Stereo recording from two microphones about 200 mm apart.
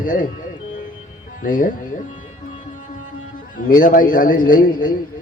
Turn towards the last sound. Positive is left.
turn(degrees=45)  # may be behind; listen again after turning